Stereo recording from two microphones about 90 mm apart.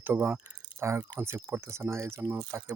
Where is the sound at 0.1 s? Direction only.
25° right (ahead or behind).